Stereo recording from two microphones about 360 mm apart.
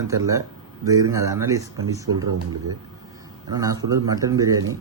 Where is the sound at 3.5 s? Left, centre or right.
Centre.